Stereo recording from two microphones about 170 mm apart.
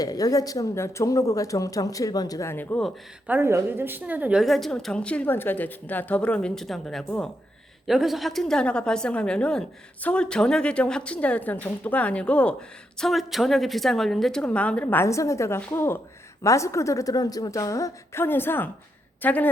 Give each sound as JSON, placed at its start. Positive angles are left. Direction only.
{"t": 0.0, "sound": "speech", "side_deg": 20}
{"t": 3.2, "sound": "a woman's voice", "side_deg": -15}